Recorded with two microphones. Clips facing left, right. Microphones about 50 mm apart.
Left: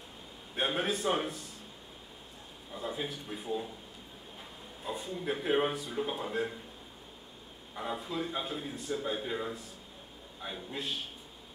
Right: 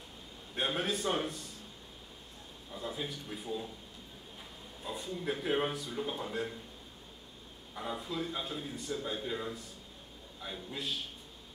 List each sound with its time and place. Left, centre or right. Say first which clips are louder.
0.6 s a man's voice: left 2 dB; centre
2.7 s a man's voice: left 2 dB; centre
4.8 s a man's voice: left 2 dB; centre
7.7 s a man's voice: left 2 dB; centre